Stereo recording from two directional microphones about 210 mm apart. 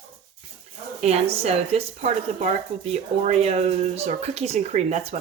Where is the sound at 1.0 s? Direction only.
30° right (ahead or behind).